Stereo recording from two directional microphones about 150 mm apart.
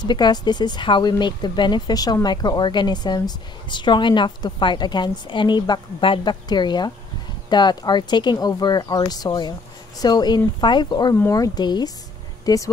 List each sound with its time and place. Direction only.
0.0 s a woman's voice: 30° left (ahead or behind)